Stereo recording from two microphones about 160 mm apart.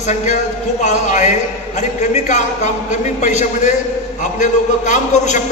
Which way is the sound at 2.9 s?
50° left (ahead or behind).